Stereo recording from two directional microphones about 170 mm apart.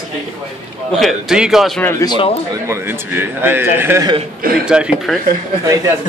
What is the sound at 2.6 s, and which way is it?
A man's voice, 15° right (ahead or behind).